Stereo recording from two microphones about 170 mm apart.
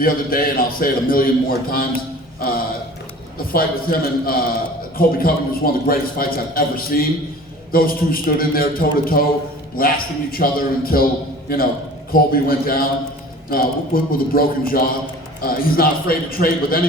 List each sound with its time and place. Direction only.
0.0 s a man's voice: 55° left (ahead or behind)